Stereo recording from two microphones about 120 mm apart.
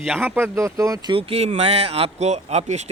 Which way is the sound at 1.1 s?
55° right (ahead or behind).